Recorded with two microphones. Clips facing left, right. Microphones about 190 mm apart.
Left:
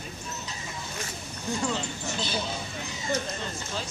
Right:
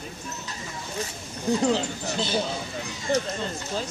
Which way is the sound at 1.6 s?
40° right (ahead or behind).